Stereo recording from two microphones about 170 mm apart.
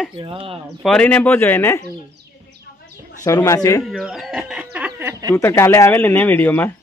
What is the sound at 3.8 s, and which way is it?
Speech, centre (ahead or behind).